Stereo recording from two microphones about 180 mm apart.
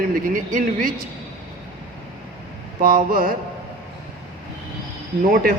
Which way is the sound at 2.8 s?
50° right (ahead or behind).